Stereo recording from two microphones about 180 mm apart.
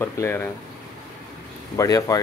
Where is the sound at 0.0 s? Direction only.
15° left (ahead or behind).